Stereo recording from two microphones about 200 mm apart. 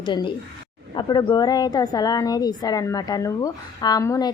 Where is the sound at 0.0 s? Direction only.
25° left (ahead or behind).